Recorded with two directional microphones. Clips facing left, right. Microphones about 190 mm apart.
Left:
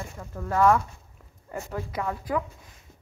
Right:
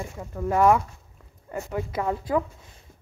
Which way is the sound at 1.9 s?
25° right (ahead or behind).